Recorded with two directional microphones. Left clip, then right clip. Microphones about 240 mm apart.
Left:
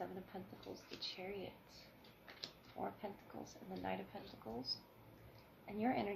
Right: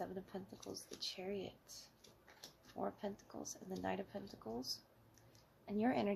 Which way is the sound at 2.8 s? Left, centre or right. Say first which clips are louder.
Right 2 dB; right.